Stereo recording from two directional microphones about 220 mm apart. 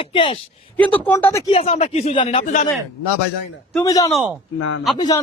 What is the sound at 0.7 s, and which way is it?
Speech, 5° left (ahead or behind).